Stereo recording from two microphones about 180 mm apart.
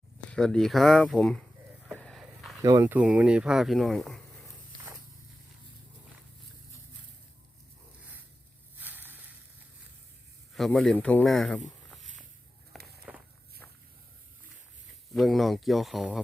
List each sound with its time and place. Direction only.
0.3 s speech: 5° left (ahead or behind)
1.8 s a sound: centre (ahead or behind)
2.6 s speech: 20° right (ahead or behind)
2.8 s speech: 10° right (ahead or behind)
8.8 s a sound: 10° right (ahead or behind)
10.5 s speech: centre (ahead or behind)
12.7 s walk: centre (ahead or behind)
15.1 s speech: centre (ahead or behind)